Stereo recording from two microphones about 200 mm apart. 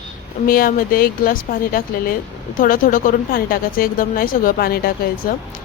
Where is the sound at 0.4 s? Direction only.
45° left (ahead or behind).